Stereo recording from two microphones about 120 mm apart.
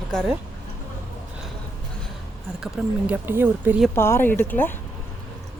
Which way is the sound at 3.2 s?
15° right (ahead or behind).